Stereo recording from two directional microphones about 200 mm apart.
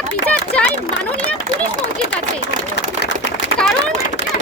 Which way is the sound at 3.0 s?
55° left (ahead or behind).